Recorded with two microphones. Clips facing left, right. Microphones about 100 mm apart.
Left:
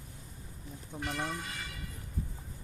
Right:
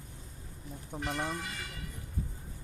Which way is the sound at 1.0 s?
5° right (ahead or behind).